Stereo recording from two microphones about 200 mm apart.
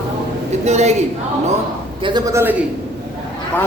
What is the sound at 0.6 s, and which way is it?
Speech, 35° right (ahead or behind).